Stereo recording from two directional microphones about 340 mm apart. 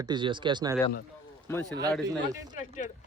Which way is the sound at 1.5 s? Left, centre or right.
Centre.